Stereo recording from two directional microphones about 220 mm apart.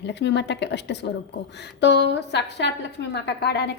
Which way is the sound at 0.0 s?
50° left (ahead or behind).